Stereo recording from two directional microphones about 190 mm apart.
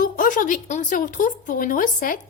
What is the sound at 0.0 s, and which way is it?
A woman's voice, 45° left (ahead or behind).